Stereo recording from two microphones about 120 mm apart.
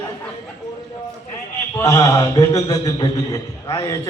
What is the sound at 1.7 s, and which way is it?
A man's voice, 30° left (ahead or behind).